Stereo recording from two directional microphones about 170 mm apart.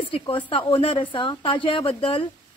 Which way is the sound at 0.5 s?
30° left (ahead or behind).